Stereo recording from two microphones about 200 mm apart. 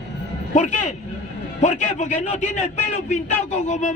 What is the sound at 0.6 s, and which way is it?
A man's voice, 35° left (ahead or behind).